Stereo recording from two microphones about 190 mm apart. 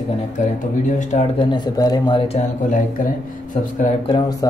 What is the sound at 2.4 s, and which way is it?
Speech, 45° left (ahead or behind).